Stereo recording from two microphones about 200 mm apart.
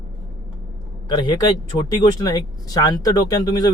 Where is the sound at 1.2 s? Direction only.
20° left (ahead or behind).